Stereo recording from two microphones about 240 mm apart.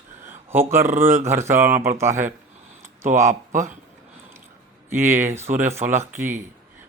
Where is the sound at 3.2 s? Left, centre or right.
Right.